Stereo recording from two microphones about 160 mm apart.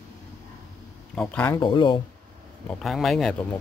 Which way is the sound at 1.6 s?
30° left (ahead or behind).